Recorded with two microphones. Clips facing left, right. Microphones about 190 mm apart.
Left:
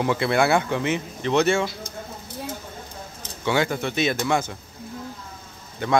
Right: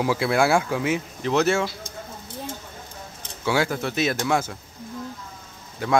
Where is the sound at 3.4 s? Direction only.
5° right (ahead or behind).